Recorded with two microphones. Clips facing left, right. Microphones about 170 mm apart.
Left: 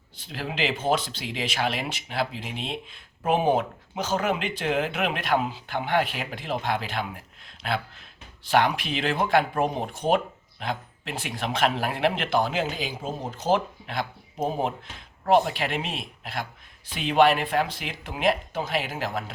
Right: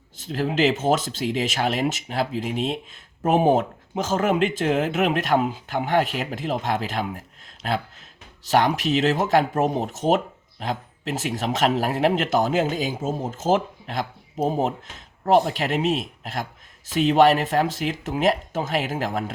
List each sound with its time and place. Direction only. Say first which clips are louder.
0.2 s speech: right 8 dB; 45° right (ahead or behind)